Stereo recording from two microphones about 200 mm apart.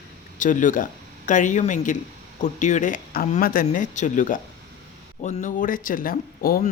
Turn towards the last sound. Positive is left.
turn(degrees=45)  # may be behind; listen again after turning